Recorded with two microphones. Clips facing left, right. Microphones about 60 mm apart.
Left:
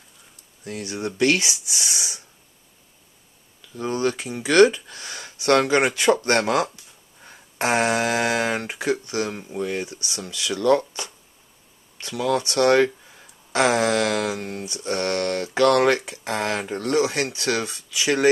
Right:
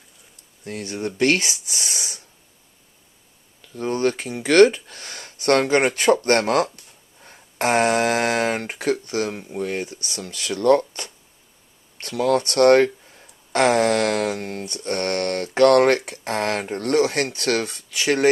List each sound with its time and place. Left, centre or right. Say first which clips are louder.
1.0 s speech: right 1 dB; right
3.8 s speech: right 2 dB; right
5.0 s a sound: right 1 dB; right
6.2 s speech: right 2 dB; right
12.0 s speech: right 3 dB; right